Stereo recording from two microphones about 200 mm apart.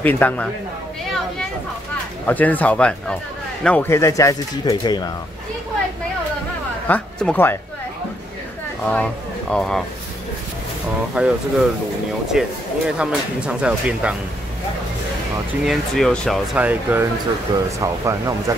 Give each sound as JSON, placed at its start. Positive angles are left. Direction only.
{"t": 0.0, "sound": "speech", "side_deg": 10}
{"t": 2.2, "sound": "speech", "side_deg": 10}
{"t": 6.9, "sound": "speech", "side_deg": 5}
{"t": 8.8, "sound": "speech", "side_deg": 5}
{"t": 11.1, "sound": "speech", "side_deg": -5}
{"t": 15.6, "sound": "speech", "side_deg": 0}